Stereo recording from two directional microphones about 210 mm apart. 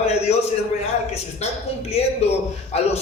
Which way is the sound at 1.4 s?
30° left (ahead or behind).